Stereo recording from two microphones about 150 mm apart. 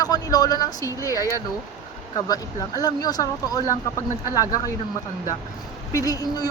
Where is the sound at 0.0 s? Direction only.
25° left (ahead or behind).